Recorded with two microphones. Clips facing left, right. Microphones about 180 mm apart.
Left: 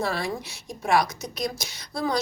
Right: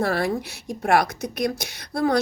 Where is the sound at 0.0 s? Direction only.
60° right (ahead or behind).